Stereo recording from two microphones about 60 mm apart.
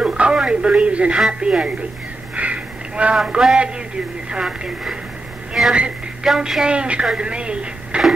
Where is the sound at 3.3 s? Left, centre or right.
Centre.